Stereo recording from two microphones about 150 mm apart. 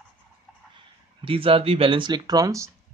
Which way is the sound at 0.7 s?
35° right (ahead or behind).